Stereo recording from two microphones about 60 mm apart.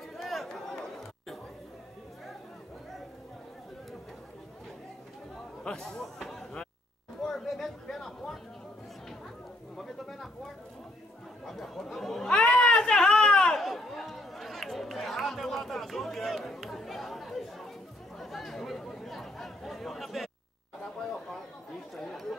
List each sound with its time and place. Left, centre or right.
0.2 s chatter: centre
5.6 s speech: centre
6.1 s a sound: centre
9.8 s a sound: centre
12.6 s chatter: centre
21.9 s chatter: centre